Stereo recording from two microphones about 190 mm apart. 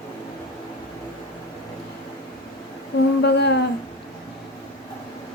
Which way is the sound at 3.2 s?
60° left (ahead or behind).